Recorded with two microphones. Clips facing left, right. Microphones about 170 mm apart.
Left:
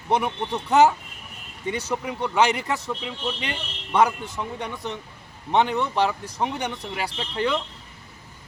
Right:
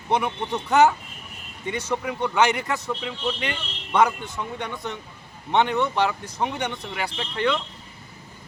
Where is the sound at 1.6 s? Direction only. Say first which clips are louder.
Even; 35° left (ahead or behind).